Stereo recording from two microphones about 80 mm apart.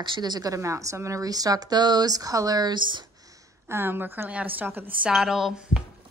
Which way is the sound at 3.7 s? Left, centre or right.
Right.